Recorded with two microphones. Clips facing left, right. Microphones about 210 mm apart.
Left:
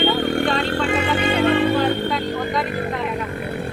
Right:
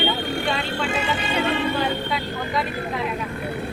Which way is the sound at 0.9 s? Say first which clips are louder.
Left 5 dB; 55° left (ahead or behind).